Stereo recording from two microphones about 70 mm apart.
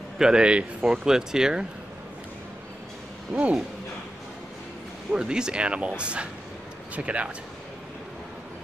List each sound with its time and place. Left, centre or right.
0.2 s speech: centre
3.3 s speech: right
5.1 s speech: centre